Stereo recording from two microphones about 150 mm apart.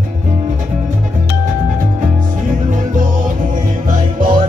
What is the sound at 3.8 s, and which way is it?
Music, 70° right (ahead or behind).